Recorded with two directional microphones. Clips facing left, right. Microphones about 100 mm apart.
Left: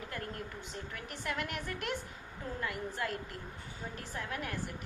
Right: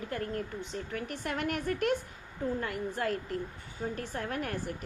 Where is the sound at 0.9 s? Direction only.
40° right (ahead or behind).